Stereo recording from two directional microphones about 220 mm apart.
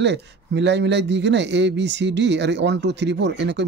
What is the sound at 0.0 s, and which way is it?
A man's voice, 50° right (ahead or behind).